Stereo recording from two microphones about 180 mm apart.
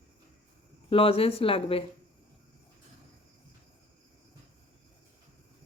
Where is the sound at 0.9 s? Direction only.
30° left (ahead or behind).